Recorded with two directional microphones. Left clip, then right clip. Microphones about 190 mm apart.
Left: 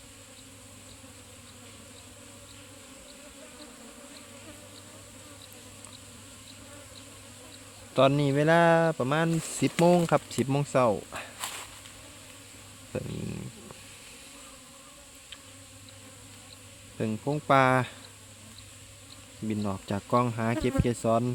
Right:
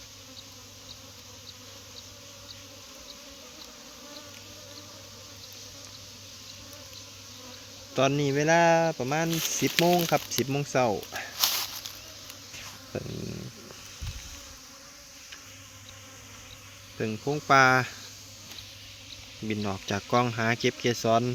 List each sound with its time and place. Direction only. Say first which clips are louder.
7.9 s speech: left 2 dB; 30° left (ahead or behind)
11.3 s a sound: right 10 dB; 60° right (ahead or behind)
12.9 s speech: left 1 dB; 10° left (ahead or behind)
17.0 s speech: right 1 dB; 20° left (ahead or behind)
19.5 s speech: right 2 dB; 20° left (ahead or behind)